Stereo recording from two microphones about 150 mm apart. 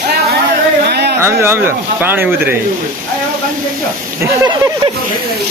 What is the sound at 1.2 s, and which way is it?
Speech, 15° right (ahead or behind).